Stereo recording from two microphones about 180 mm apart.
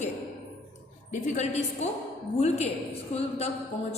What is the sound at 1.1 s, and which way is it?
A woman's voice, 45° left (ahead or behind).